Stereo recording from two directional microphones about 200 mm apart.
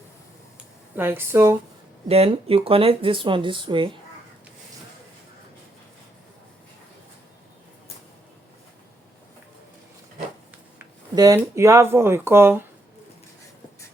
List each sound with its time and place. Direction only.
0.9 s speech: 10° right (ahead or behind)
2.0 s speech: 30° right (ahead or behind)
11.1 s speech: 20° right (ahead or behind)